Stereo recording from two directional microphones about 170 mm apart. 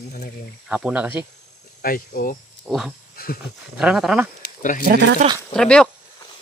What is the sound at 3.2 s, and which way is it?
Speech, 60° left (ahead or behind).